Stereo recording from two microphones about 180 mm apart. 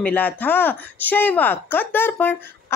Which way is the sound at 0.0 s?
10° left (ahead or behind).